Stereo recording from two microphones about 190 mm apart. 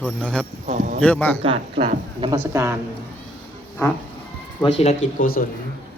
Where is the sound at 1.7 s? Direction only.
50° right (ahead or behind).